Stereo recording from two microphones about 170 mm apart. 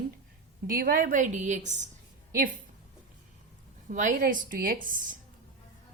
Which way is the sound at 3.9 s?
50° right (ahead or behind).